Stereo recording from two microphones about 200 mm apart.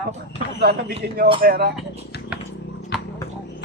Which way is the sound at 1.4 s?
50° right (ahead or behind).